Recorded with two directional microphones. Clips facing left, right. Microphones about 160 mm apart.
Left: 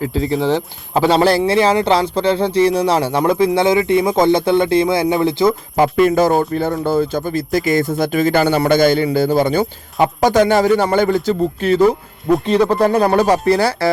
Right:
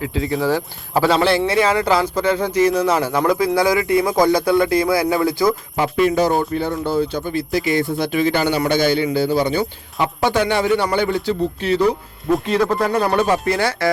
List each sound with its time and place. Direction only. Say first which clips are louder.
0.4 s speech: left 2 dB; 20° left (ahead or behind)
5.7 s speech: left 4 dB; 45° left (ahead or behind)
12.5 s speech: left 6 dB; 30° left (ahead or behind)